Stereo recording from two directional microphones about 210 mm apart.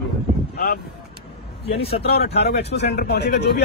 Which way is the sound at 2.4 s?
50° left (ahead or behind).